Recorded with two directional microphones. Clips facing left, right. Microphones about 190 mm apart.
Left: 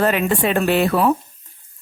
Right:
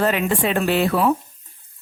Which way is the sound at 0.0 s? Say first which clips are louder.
Left 2 dB; 55° left (ahead or behind).